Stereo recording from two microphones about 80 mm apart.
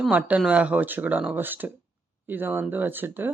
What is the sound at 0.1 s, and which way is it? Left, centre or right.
Speech, centre.